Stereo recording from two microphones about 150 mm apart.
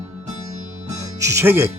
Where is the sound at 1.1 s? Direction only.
20° right (ahead or behind).